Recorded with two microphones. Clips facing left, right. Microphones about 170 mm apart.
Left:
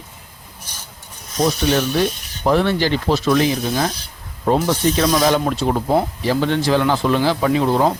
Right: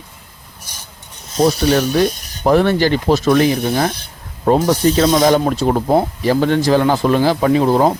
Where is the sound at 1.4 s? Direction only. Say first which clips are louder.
Right 4 dB; 40° right (ahead or behind); by 3.9 s 55° right (ahead or behind).